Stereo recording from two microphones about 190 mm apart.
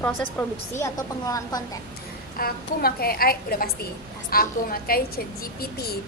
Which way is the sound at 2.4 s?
50° left (ahead or behind).